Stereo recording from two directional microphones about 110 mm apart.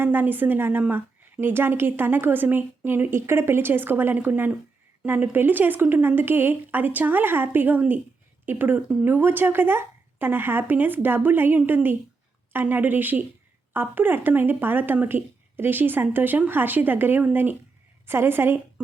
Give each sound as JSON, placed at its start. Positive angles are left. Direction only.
{"t": 0.0, "sound": "a woman's voice", "side_deg": -15}